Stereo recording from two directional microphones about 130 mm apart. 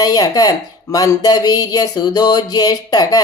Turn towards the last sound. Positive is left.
turn(degrees=30)  # may be behind; listen again after turning